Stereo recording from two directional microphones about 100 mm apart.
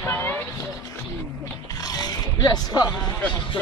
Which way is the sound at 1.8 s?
40° left (ahead or behind).